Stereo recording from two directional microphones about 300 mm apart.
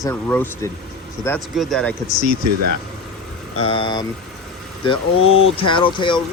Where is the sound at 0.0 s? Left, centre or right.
Centre.